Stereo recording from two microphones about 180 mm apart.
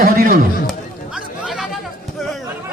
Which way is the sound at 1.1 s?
5° right (ahead or behind).